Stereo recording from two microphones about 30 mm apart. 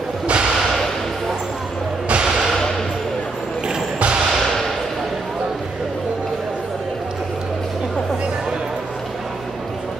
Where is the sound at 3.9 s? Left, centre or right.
Right.